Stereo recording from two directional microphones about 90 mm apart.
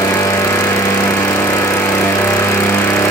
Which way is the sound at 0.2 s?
35° left (ahead or behind).